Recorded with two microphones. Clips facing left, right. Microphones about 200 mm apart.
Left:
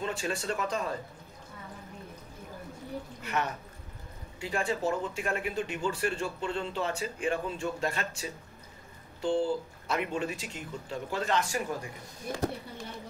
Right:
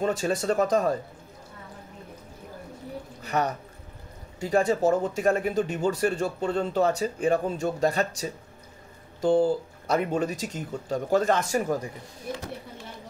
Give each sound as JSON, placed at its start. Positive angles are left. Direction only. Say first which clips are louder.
{"t": 0.0, "sound": "speech", "louder": "right 8 dB", "side_deg": -40}
{"t": 3.2, "sound": "speech", "louder": "right 7 dB", "side_deg": -40}